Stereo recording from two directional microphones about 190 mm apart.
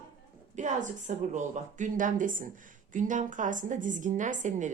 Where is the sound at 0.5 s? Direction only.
40° right (ahead or behind).